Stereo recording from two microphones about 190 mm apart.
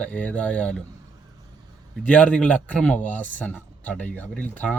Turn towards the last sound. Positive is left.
turn(degrees=5)  # may be behind; listen again after turning